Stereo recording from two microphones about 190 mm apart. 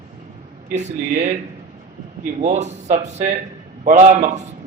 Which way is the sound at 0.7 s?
40° right (ahead or behind).